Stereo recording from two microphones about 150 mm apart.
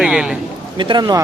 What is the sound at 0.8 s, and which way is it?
Speech, 30° right (ahead or behind).